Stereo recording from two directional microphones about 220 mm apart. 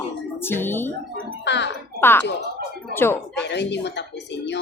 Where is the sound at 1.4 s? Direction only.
50° left (ahead or behind).